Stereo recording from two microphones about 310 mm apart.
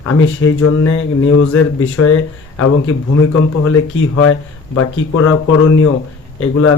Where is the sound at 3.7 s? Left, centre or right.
Left.